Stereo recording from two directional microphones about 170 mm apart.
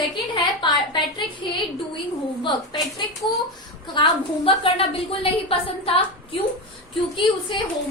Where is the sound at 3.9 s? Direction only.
30° left (ahead or behind).